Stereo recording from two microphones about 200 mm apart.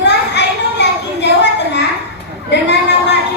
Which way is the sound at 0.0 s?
60° left (ahead or behind).